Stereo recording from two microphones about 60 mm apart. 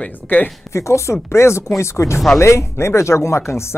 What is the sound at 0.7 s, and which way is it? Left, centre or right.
Speech, left.